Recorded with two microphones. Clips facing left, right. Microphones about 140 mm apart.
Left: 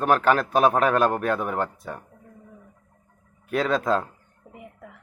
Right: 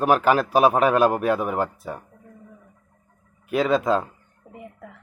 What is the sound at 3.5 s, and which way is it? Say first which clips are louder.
Speech: right 2 dB; 5° right (ahead or behind).